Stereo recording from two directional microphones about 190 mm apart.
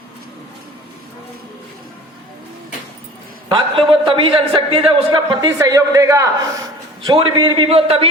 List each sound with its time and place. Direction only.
3.5 s a man's voice: 25° right (ahead or behind)